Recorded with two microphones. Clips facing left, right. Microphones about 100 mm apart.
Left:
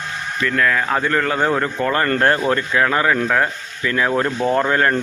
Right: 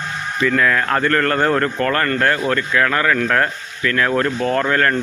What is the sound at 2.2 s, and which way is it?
Speech, 30° left (ahead or behind).